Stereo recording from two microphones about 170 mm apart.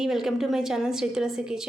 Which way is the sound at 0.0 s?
Centre (ahead or behind).